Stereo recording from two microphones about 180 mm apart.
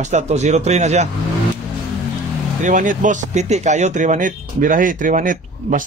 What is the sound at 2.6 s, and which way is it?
A man's voice, 45° right (ahead or behind).